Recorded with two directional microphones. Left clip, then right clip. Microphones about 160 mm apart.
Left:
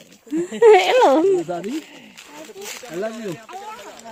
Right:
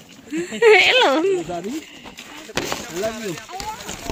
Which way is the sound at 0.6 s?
30° left (ahead or behind).